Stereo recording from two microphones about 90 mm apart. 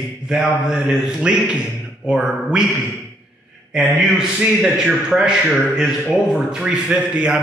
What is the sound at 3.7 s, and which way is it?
A man's voice, 10° right (ahead or behind).